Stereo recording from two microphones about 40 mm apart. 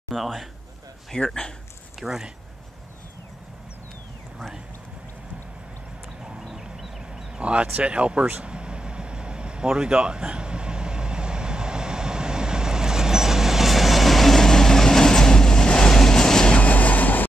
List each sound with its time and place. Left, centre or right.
0.1 s a man's voice: centre
1.1 s a man's voice: centre
2.0 s speech: centre
6.2 s horse: right
6.5 s vehicle: centre
7.3 s speech: right
8.4 s vehicle: right; by 16.5 s centre
16.5 s vehicle: left